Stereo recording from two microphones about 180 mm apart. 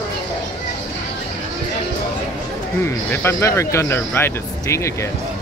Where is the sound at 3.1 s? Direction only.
15° left (ahead or behind).